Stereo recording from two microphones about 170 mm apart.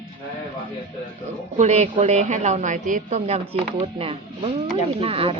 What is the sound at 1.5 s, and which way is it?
Speech, 40° right (ahead or behind).